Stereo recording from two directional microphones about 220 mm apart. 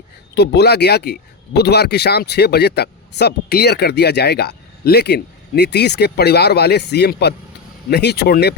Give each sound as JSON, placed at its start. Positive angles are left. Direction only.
{"t": 0.3, "sound": "speech", "side_deg": 50}